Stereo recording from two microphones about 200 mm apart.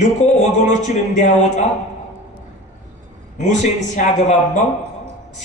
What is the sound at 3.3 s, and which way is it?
A man's voice, 35° left (ahead or behind).